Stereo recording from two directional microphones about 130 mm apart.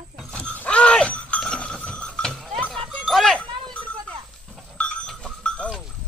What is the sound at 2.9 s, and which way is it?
Music, centre (ahead or behind).